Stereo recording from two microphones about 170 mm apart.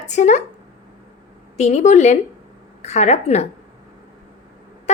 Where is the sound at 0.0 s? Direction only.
45° left (ahead or behind).